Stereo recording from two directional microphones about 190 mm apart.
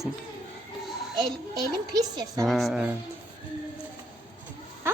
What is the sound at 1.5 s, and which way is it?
Speech, 20° right (ahead or behind).